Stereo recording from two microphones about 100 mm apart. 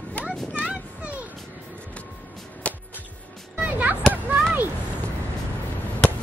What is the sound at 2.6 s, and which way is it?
Music, 15° left (ahead or behind).